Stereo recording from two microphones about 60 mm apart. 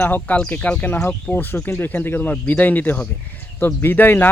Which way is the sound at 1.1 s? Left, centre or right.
Left.